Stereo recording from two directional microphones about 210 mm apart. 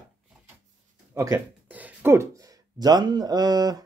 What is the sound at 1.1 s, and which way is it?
Speech, 15° right (ahead or behind).